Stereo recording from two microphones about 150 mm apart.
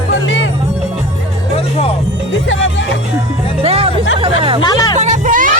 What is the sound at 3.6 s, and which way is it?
Music, 40° right (ahead or behind).